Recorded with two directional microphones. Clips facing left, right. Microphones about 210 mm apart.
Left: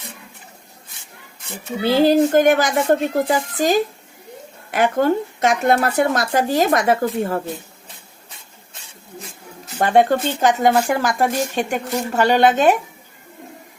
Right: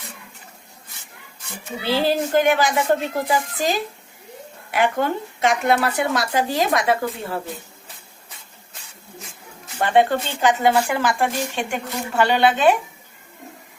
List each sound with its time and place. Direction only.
1.8 s speech: 45° left (ahead or behind)
9.7 s speech: 40° left (ahead or behind)